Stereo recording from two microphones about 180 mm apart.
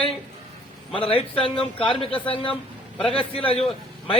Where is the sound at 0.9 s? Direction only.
30° left (ahead or behind).